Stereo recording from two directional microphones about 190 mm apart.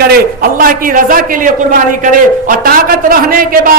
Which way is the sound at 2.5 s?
50° right (ahead or behind).